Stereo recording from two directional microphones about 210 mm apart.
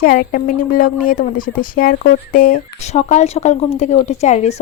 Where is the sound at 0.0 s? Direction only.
40° left (ahead or behind).